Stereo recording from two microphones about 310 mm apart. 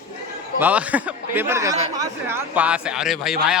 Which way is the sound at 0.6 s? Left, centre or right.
Centre.